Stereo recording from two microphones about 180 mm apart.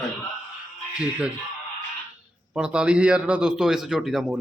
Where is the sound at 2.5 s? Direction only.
5° right (ahead or behind).